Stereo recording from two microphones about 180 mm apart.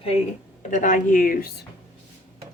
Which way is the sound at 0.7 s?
45° left (ahead or behind).